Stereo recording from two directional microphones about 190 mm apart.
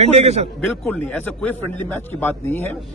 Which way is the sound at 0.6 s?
5° left (ahead or behind).